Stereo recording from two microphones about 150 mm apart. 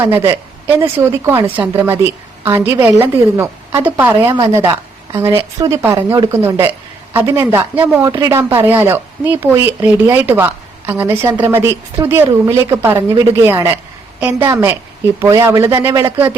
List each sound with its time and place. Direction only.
0.0 s a woman's voice: 15° right (ahead or behind)